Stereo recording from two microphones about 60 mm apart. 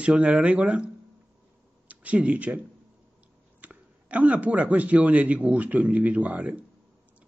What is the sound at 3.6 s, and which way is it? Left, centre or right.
Speech, right.